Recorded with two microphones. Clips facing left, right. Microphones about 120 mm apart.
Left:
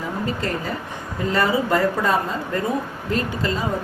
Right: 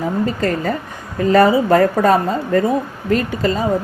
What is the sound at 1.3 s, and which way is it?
A woman's voice, 60° right (ahead or behind).